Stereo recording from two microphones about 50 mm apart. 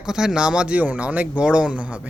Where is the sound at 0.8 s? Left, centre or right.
Right.